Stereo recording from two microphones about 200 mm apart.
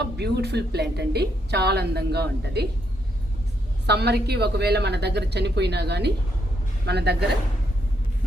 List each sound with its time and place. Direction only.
0.2 s a woman's voice: 55° right (ahead or behind)
3.8 s a woman's voice: 55° right (ahead or behind)